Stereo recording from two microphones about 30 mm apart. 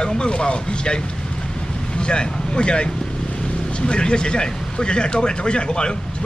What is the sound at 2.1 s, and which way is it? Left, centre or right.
Speech, left.